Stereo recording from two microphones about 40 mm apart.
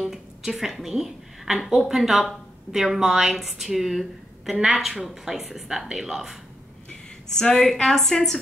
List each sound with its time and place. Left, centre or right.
0.0 s a woman's voice: centre
6.9 s a sound: left
7.6 s a woman's voice: centre